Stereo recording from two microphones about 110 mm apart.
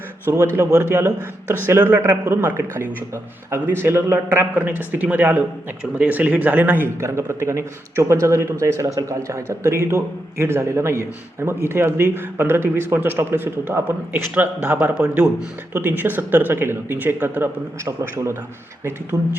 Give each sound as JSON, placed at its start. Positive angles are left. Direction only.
{"t": 0.3, "sound": "a man's voice", "side_deg": -25}
{"t": 19.1, "sound": "speech", "side_deg": -35}